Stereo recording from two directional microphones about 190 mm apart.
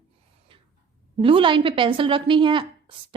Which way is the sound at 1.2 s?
30° right (ahead or behind).